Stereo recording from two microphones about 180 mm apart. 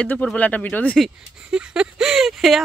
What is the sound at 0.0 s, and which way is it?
Speech, 5° left (ahead or behind).